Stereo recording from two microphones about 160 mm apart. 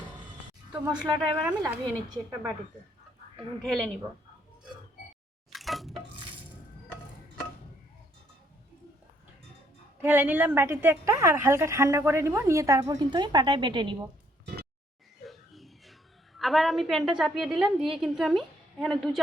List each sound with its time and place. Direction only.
0.7 s a woman's voice: 5° right (ahead or behind)
3.6 s a woman's voice: centre (ahead or behind)
5.5 s water: centre (ahead or behind)
10.0 s a woman's voice: 15° right (ahead or behind); by 13.9 s 30° right (ahead or behind)
15.3 s a woman's voice: centre (ahead or behind)